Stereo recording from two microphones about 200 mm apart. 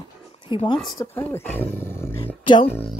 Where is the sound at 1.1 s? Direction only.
10° left (ahead or behind).